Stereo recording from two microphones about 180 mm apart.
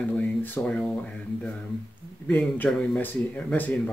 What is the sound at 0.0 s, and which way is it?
Speech, 10° left (ahead or behind).